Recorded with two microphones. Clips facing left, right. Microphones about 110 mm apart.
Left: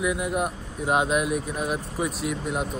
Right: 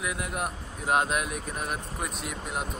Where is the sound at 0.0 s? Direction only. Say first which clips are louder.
Left 6 dB; centre (ahead or behind).